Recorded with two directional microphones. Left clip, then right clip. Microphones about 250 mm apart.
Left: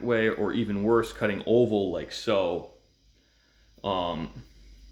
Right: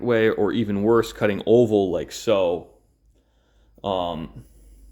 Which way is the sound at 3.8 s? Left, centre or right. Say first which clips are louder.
Right 4 dB; right.